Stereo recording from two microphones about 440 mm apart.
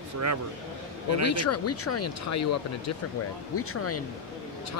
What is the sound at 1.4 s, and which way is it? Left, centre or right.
Speech, left.